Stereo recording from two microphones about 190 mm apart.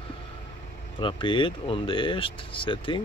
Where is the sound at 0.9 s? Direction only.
25° left (ahead or behind).